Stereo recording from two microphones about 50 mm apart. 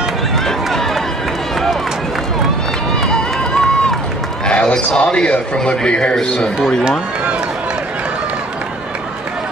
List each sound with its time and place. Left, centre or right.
3.0 s run: centre
4.5 s a man's voice: left